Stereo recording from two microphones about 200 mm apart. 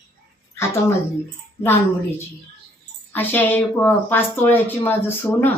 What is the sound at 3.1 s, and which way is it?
Speech, 10° left (ahead or behind).